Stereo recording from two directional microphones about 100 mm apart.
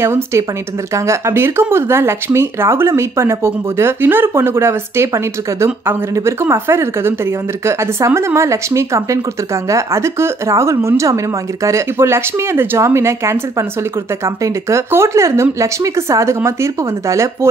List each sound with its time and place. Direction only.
0.0 s speech: 25° right (ahead or behind)